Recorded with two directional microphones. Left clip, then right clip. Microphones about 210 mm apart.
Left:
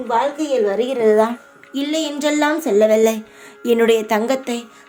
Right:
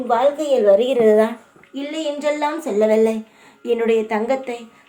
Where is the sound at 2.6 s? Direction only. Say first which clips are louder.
Left 2 dB; 30° left (ahead or behind).